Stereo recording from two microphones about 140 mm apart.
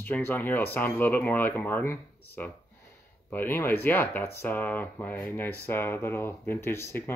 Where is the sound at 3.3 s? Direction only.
15° left (ahead or behind).